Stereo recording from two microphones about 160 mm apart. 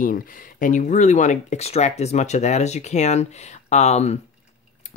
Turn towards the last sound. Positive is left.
turn(degrees=45)  # may be behind; listen again after turning